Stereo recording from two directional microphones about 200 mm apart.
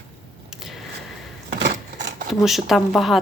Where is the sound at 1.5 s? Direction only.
55° right (ahead or behind).